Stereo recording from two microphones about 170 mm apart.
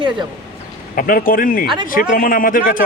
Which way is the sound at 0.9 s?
55° left (ahead or behind).